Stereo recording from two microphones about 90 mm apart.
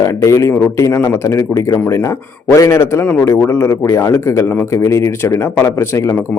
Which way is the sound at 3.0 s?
20° left (ahead or behind).